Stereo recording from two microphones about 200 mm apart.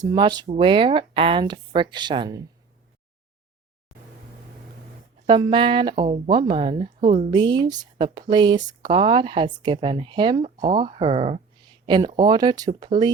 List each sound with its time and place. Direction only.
0.0 s speech: 20° right (ahead or behind)
5.2 s speech: 25° right (ahead or behind)